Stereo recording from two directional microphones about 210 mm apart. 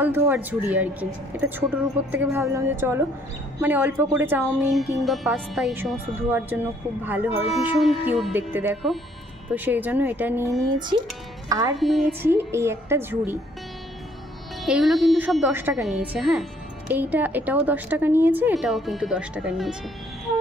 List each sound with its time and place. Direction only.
0.0 s speech: 10° right (ahead or behind)
10.7 s speech: 20° right (ahead or behind)
11.8 s speech: centre (ahead or behind)
12.2 s speech: 10° right (ahead or behind)
14.6 s speech: centre (ahead or behind)